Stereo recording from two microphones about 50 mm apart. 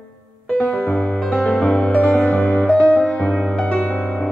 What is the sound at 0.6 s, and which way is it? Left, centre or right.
Music, left.